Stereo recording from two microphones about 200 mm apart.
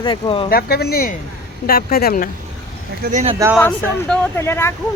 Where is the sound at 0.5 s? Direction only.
50° left (ahead or behind).